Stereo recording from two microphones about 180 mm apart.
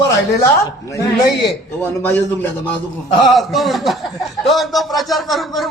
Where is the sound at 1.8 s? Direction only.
10° left (ahead or behind).